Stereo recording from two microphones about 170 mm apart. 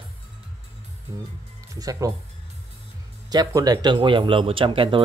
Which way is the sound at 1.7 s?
20° right (ahead or behind).